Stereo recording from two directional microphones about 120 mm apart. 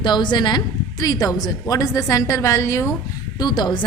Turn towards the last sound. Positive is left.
turn(degrees=40)  # may be behind; listen again after turning